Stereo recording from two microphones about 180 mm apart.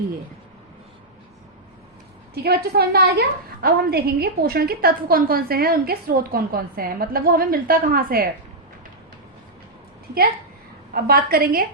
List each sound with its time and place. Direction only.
2.3 s a woman's voice: 60° right (ahead or behind)
10.9 s a woman's voice: 60° right (ahead or behind)